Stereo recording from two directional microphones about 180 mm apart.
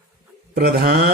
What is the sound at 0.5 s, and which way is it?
Speech, 45° right (ahead or behind).